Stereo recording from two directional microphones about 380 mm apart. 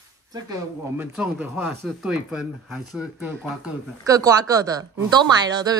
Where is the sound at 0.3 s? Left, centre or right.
Centre.